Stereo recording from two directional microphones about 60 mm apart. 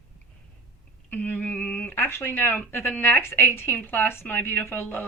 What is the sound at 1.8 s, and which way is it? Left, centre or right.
Speech, left.